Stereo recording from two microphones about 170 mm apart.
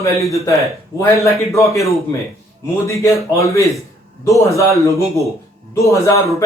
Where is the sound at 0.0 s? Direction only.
20° left (ahead or behind).